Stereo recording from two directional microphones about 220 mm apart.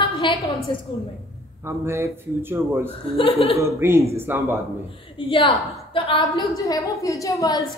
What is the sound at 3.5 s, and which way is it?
Speech, 10° right (ahead or behind).